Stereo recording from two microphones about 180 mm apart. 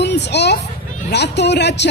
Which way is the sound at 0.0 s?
70° left (ahead or behind).